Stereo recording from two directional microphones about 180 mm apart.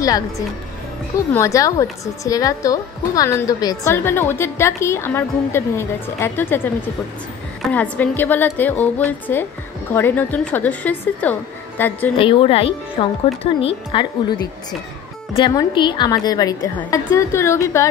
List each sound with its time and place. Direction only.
1.3 s a woman's voice: 15° left (ahead or behind)
7.7 s a woman's voice: 10° left (ahead or behind)
12.2 s a woman's voice: 30° left (ahead or behind)